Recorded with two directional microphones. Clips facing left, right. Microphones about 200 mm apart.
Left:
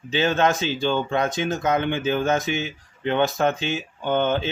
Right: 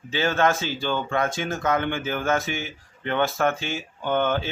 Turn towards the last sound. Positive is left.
turn(degrees=20)  # may be behind; listen again after turning